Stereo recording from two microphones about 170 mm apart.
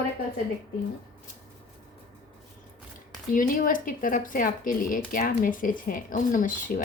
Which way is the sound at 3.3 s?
55° left (ahead or behind).